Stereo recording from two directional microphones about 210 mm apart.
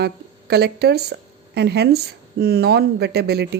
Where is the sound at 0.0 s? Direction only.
50° right (ahead or behind).